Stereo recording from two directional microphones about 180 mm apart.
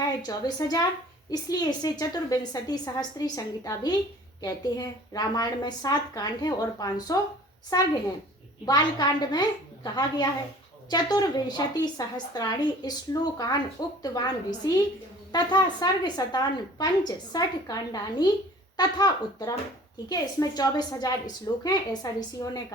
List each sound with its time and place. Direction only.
0.2 s a woman's voice: 20° left (ahead or behind)